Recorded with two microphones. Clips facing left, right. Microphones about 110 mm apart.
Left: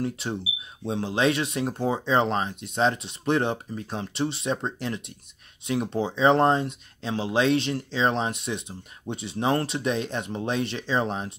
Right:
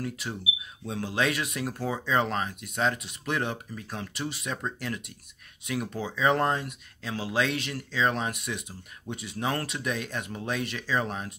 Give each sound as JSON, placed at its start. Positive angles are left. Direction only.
{"t": 0.0, "sound": "speech", "side_deg": 25}